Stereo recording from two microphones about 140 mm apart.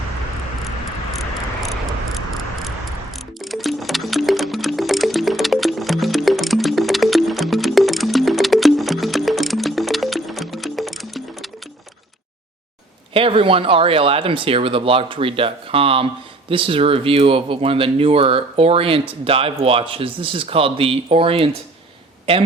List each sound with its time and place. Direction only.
1.2 s cricket: centre (ahead or behind)
13.1 s speech: 40° right (ahead or behind)